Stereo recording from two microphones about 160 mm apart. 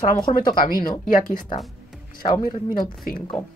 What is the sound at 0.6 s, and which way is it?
Speech, 65° left (ahead or behind).